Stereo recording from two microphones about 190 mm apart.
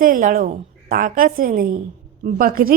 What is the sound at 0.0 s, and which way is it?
A woman's voice, 45° right (ahead or behind).